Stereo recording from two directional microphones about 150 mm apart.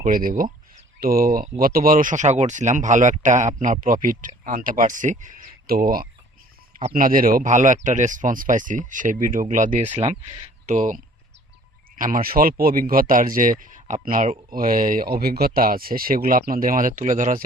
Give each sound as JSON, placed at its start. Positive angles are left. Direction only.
{"t": 0.0, "sound": "speech", "side_deg": -70}
{"t": 6.7, "sound": "speech", "side_deg": -60}